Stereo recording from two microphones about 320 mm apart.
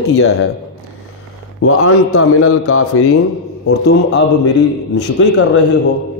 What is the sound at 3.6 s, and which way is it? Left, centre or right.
A man's voice, left.